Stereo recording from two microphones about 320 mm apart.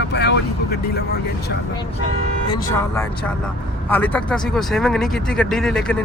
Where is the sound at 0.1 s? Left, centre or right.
Left.